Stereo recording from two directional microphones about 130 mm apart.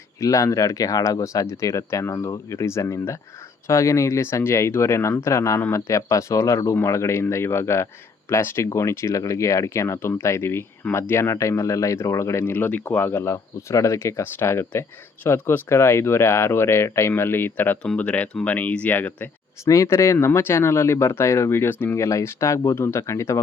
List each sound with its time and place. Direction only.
0.2 s speech: 25° left (ahead or behind)